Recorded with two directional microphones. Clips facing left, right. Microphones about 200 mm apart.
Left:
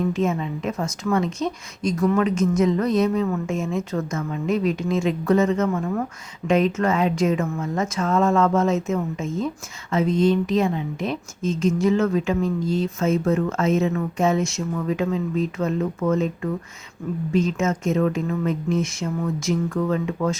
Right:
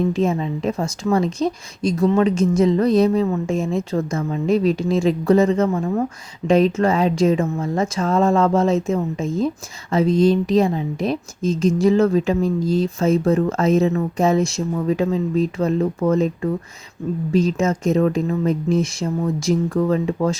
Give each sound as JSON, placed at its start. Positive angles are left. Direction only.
{"t": 0.0, "sound": "a woman's voice", "side_deg": -35}